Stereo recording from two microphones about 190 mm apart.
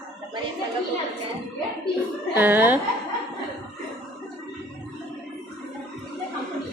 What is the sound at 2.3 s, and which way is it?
Speech, 10° right (ahead or behind).